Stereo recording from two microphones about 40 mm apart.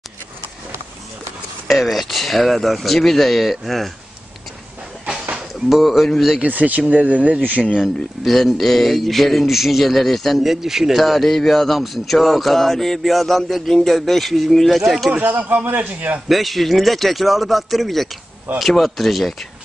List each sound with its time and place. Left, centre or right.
1.7 s a man's voice: centre
5.7 s a man's voice: centre
6.4 s speech: right
7.7 s a man's voice: centre
11.0 s a man's voice: centre
15.2 s a man's voice: right
16.3 s a man's voice: centre